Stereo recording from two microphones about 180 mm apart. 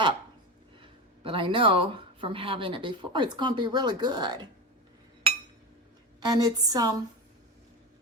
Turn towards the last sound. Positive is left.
turn(degrees=-20)  # may be behind; listen again after turning